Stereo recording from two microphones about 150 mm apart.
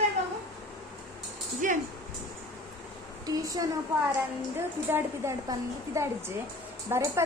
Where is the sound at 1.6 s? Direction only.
60° right (ahead or behind).